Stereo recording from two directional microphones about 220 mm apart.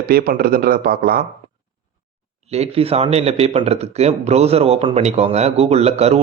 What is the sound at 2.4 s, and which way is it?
Speech, 30° right (ahead or behind).